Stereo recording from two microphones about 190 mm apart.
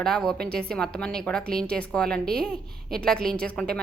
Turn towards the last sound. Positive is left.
turn(degrees=5)  # may be behind; listen again after turning